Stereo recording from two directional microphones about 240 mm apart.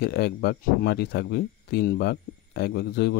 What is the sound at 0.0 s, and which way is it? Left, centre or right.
Speech, left.